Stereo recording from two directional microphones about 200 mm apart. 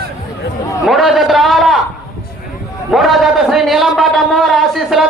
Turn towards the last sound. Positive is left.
turn(degrees=0)  # may be behind; listen again after turning